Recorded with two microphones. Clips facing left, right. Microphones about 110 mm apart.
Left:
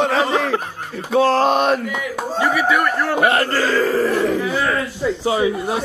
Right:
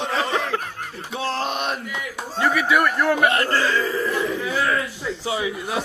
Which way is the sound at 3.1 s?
40° left (ahead or behind).